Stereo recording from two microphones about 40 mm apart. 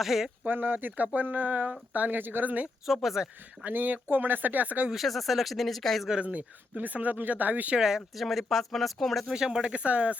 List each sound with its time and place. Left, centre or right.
0.0 s speech: centre
0.4 s speech: right
2.1 s speech: right
2.8 s speech: centre
3.7 s speech: right
4.9 s speech: centre
6.1 s speech: right
6.7 s speech: right
7.8 s speech: centre
8.1 s speech: centre
9.3 s speech: centre
9.7 s speech: right